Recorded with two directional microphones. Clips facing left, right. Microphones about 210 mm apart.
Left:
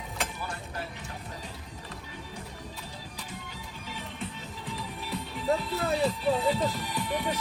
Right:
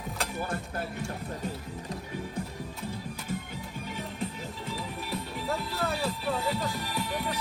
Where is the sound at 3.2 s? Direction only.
50° right (ahead or behind).